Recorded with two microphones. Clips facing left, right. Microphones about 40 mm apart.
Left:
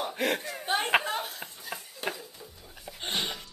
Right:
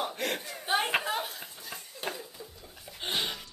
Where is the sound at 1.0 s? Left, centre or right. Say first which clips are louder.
Even; centre.